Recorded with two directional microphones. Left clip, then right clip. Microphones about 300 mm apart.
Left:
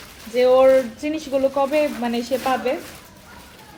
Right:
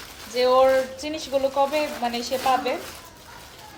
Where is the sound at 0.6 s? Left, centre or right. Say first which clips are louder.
Left 4 dB; left.